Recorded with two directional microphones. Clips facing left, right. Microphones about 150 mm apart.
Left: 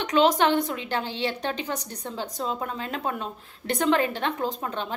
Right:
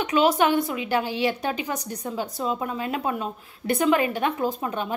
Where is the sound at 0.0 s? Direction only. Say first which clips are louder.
Right 1 dB; 10° right (ahead or behind).